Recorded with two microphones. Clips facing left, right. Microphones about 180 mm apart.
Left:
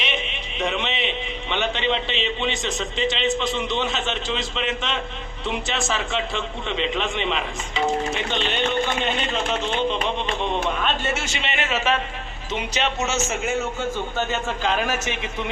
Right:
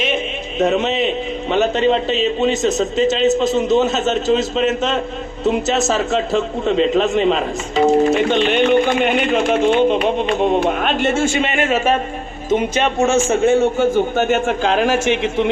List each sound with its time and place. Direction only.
0.6 s a man's voice: 45° right (ahead or behind)
13.1 s a man's voice: 30° right (ahead or behind)
14.2 s a man's voice: 50° right (ahead or behind)
15.0 s speech: 90° right